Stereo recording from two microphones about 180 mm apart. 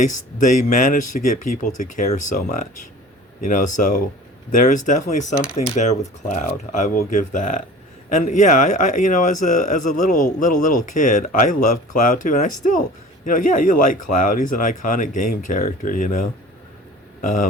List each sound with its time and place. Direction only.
0.1 s speech: 45° left (ahead or behind)